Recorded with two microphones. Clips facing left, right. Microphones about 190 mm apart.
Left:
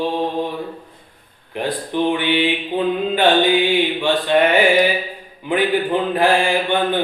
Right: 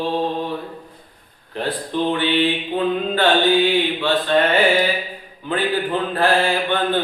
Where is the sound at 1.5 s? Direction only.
15° left (ahead or behind).